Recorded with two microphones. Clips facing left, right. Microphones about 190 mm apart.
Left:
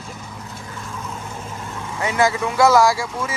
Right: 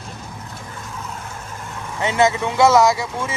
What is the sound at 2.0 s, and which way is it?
Speech, 25° right (ahead or behind).